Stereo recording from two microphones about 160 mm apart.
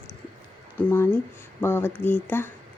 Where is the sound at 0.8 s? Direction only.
10° left (ahead or behind).